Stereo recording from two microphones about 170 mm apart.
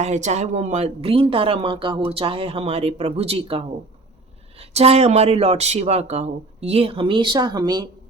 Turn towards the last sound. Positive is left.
turn(degrees=-25)  # may be behind; listen again after turning